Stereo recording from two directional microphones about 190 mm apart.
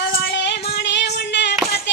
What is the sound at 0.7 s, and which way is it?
Female singing, 65° left (ahead or behind).